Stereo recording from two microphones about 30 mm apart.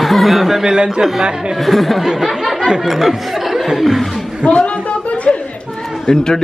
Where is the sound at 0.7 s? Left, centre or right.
Right.